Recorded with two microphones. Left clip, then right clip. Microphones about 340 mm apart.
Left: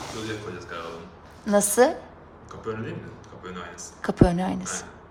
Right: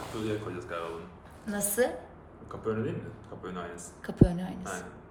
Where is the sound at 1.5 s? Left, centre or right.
Centre.